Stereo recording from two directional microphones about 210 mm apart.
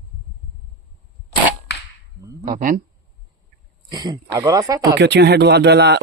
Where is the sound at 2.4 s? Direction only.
40° right (ahead or behind).